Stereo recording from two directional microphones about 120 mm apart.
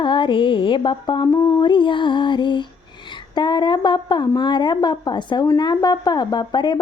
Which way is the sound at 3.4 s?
40° left (ahead or behind).